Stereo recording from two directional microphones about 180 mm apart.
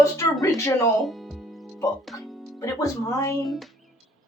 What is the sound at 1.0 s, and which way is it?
Music, centre (ahead or behind).